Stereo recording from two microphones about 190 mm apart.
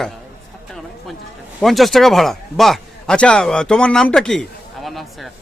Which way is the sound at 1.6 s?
Centre (ahead or behind).